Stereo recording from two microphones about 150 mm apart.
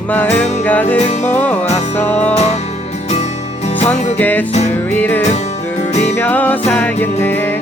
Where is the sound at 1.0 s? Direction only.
45° left (ahead or behind).